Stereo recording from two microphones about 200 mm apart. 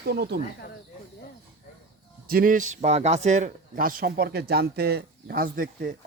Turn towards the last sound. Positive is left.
turn(degrees=-45)  # may be behind; listen again after turning